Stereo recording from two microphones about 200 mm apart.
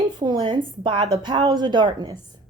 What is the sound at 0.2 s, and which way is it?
A woman's voice, 25° right (ahead or behind).